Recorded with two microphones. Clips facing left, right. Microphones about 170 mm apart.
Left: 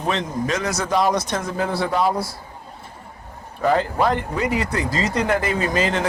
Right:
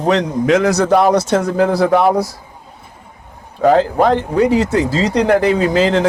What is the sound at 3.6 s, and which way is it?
Speech, 90° right.